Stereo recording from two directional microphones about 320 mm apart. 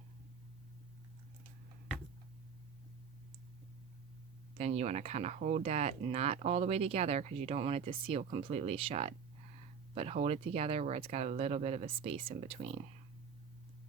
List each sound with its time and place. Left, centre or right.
4.5 s speech: right